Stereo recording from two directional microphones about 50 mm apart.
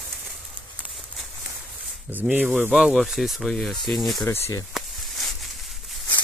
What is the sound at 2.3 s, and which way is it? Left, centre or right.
Speech, right.